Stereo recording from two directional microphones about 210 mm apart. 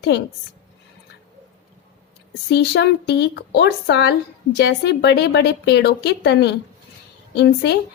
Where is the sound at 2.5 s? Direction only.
55° left (ahead or behind).